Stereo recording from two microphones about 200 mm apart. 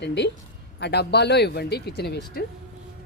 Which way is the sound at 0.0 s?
60° left (ahead or behind).